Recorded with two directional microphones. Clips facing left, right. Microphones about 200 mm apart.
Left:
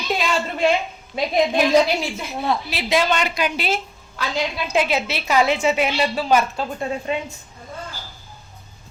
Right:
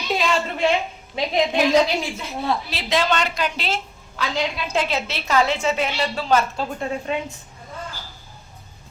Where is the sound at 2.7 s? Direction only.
10° left (ahead or behind).